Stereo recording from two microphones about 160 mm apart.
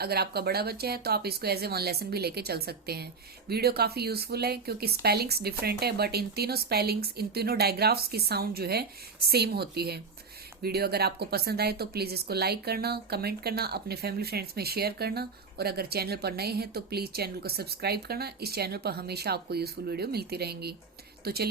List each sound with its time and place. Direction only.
0.0 s speech: 80° right